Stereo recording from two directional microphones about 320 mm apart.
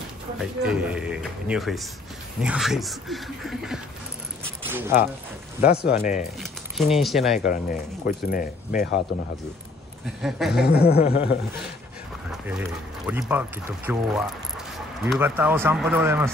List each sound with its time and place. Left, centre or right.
0.4 s speech: centre
5.6 s speech: left
6.4 s speech: centre
7.3 s speech: left
10.0 s speech: centre
10.7 s speech: left
12.3 s speech: centre